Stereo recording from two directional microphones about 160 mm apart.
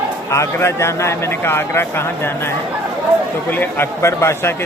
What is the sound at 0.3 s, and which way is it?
A man's voice, 20° left (ahead or behind).